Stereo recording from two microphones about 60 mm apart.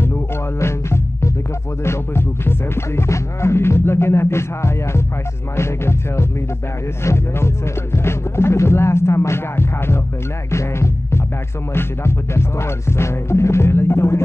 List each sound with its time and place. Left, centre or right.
0.0 s music: left
5.6 s speech: left
10.5 s music: left
11.7 s speech: left